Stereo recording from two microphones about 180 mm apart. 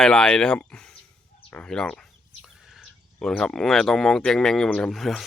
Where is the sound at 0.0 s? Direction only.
5° left (ahead or behind).